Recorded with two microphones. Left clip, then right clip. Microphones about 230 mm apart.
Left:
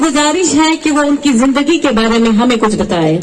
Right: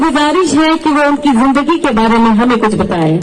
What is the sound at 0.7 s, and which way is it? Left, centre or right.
Speech, left.